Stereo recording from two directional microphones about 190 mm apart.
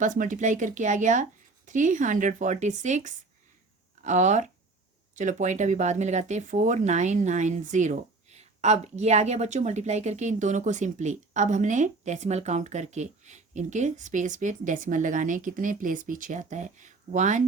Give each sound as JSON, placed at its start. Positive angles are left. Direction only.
{"t": 0.0, "sound": "speech", "side_deg": -45}